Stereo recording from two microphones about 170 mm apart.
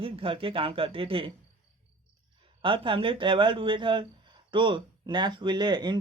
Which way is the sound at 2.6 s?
30° right (ahead or behind).